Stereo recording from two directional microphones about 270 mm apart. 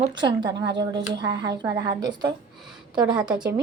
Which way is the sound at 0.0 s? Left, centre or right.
Centre.